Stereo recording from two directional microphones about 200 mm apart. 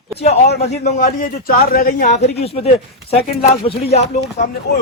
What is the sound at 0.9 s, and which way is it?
A man's voice, 45° left (ahead or behind).